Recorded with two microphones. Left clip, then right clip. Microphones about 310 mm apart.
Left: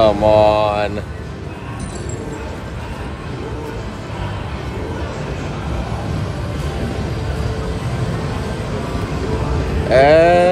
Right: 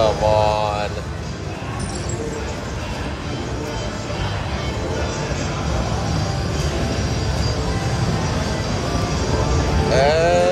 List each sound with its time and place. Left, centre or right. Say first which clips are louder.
0.0 s mantra: left 5 dB; left
9.9 s music: left 7 dB; left